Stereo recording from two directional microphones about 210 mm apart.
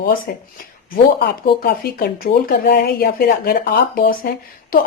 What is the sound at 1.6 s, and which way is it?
Speech, 45° left (ahead or behind).